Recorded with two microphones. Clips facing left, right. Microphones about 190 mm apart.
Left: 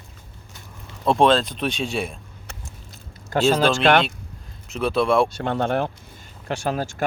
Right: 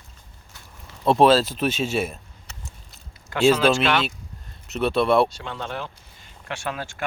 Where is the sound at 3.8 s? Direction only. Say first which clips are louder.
Left 5 dB; 50° left (ahead or behind).